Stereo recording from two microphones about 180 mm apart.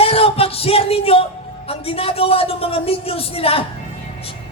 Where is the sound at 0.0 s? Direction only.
30° left (ahead or behind).